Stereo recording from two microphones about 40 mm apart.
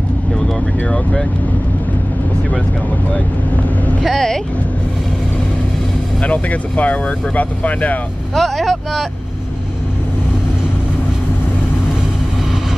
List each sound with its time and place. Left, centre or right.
3.1 s speech: left
4.0 s speech: centre
6.2 s speech: left
8.4 s speech: centre